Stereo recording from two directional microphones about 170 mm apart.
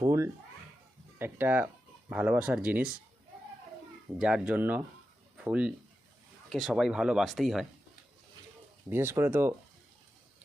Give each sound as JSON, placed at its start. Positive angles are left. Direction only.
{"t": 0.0, "sound": "a sound", "side_deg": -20}
{"t": 1.2, "sound": "speech", "side_deg": -10}
{"t": 4.2, "sound": "speech", "side_deg": -5}
{"t": 8.9, "sound": "speech", "side_deg": -15}